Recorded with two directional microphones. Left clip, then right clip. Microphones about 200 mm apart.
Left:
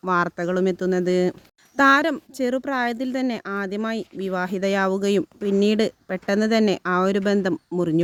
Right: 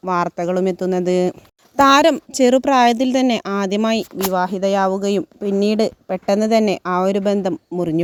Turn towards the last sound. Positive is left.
turn(degrees=0)  # may be behind; listen again after turning